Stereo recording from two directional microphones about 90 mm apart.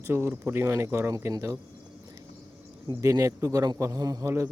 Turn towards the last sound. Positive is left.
turn(degrees=-40)  # may be behind; listen again after turning